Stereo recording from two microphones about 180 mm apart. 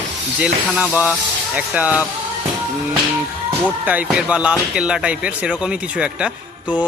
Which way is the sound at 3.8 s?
10° right (ahead or behind).